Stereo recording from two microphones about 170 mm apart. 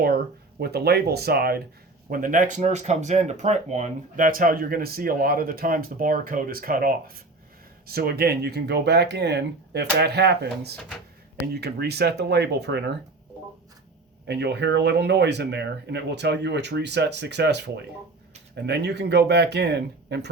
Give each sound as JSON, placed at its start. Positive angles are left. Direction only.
{"t": 0.6, "sound": "speech", "side_deg": -70}
{"t": 2.0, "sound": "speech", "side_deg": -55}
{"t": 14.3, "sound": "speech", "side_deg": -80}
{"t": 18.5, "sound": "speech", "side_deg": -80}